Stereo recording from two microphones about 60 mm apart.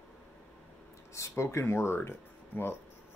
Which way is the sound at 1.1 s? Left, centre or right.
Left.